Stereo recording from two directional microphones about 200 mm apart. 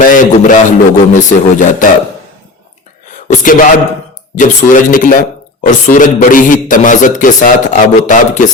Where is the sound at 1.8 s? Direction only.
40° left (ahead or behind).